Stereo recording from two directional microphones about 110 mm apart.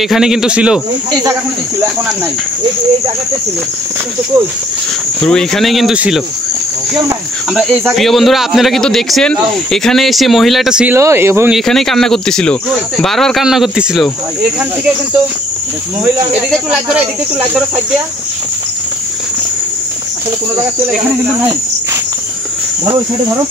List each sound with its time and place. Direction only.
0.0 s speech: 5° right (ahead or behind)
5.2 s speech: 5° left (ahead or behind)
5.9 s cricket: 5° right (ahead or behind)
7.9 s speech: centre (ahead or behind)
10.9 s speech: 25° right (ahead or behind)
11.5 s speech: 5° left (ahead or behind)
16.4 s speech: centre (ahead or behind)
22.8 s speech: 30° right (ahead or behind)